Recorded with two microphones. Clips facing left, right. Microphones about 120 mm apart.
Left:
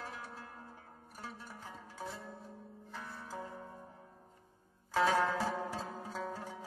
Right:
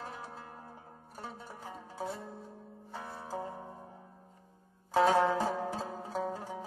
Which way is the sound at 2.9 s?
25° right (ahead or behind).